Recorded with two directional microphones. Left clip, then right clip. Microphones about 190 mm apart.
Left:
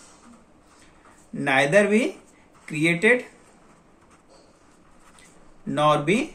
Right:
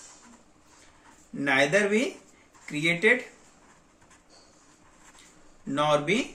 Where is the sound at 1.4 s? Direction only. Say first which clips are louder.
Left 4 dB; 45° left (ahead or behind).